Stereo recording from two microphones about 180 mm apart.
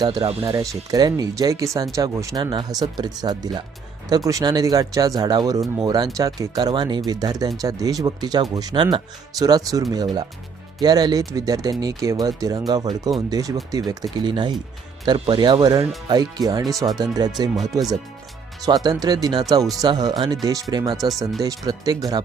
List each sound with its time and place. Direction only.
0.0 s speech: 20° right (ahead or behind)
0.3 s speech: 35° right (ahead or behind)
0.9 s speech: 20° right (ahead or behind)